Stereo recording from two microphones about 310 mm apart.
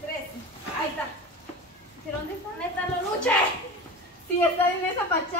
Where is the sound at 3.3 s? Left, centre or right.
Centre.